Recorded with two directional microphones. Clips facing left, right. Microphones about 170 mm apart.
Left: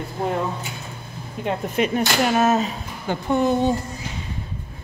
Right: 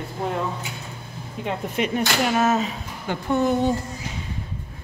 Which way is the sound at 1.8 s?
45° left (ahead or behind).